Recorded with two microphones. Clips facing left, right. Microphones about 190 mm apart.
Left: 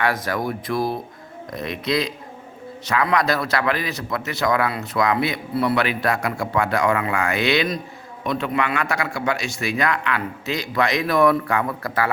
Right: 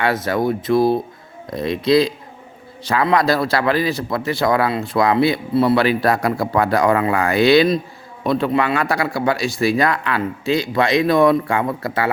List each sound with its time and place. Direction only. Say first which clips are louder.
0.0 s a man's voice: right 4 dB; 25° right (ahead or behind)